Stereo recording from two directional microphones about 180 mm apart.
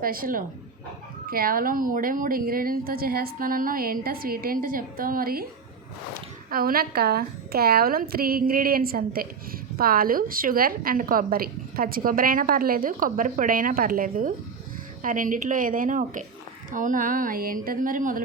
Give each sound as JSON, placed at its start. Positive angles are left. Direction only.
{"t": 0.0, "sound": "a woman's voice", "side_deg": -55}
{"t": 6.5, "sound": "a woman's voice", "side_deg": -55}